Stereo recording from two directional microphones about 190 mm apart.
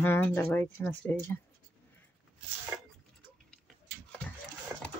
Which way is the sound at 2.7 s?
10° right (ahead or behind).